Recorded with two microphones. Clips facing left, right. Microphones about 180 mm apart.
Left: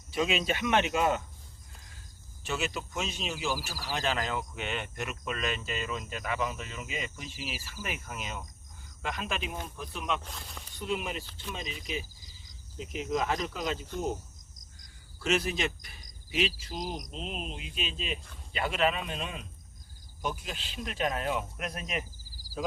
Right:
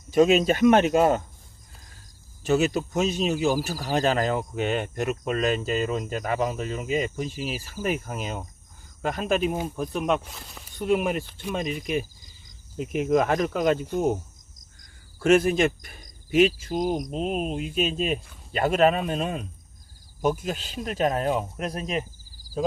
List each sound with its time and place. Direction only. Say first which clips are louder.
0.1 s speech: right 11 dB; 45° right (ahead or behind)
2.4 s speech: right 12 dB; 40° right (ahead or behind)